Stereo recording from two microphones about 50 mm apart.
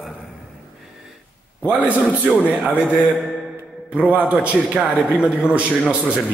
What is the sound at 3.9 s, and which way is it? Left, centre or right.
Speech, right.